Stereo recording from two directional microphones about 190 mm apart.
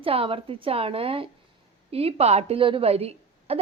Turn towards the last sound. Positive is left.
turn(degrees=-30)  # may be behind; listen again after turning